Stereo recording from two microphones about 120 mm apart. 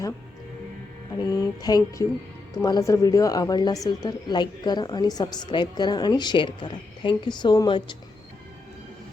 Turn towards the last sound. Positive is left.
turn(degrees=40)  # may be behind; listen again after turning